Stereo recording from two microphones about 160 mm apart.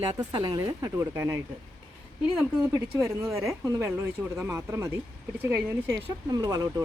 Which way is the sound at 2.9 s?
15° right (ahead or behind).